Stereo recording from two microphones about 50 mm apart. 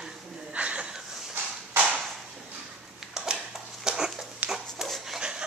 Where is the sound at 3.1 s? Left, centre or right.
Centre.